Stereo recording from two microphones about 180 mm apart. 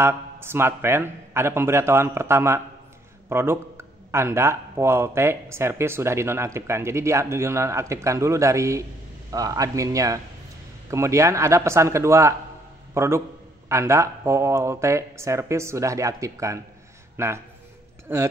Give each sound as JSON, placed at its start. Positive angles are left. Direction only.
{"t": 0.0, "sound": "a man's voice", "side_deg": -15}